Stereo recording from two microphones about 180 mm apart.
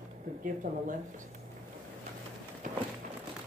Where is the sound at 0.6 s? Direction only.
45° right (ahead or behind).